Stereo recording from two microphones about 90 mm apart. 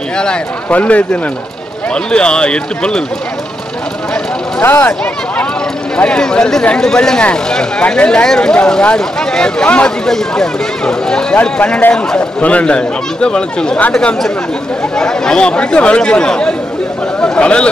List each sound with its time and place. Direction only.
0.2 s speech: 10° left (ahead or behind)
4.6 s speech: 20° left (ahead or behind)
5.9 s speech: 10° left (ahead or behind)